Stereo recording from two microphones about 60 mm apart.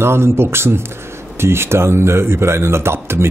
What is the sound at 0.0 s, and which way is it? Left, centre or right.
Speech, right.